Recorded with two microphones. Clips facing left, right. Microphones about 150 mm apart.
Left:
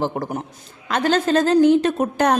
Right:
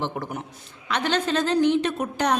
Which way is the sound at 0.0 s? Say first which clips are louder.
Left 6 dB; 40° left (ahead or behind).